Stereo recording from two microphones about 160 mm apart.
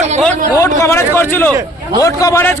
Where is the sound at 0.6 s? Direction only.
15° left (ahead or behind).